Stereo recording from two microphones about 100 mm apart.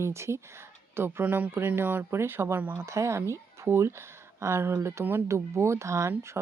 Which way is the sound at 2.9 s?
30° right (ahead or behind).